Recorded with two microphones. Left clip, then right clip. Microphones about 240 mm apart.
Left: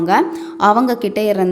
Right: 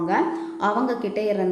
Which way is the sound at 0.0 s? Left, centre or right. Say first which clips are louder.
Left 7 dB; left.